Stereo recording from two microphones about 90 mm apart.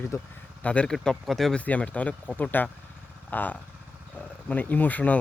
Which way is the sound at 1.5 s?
15° left (ahead or behind).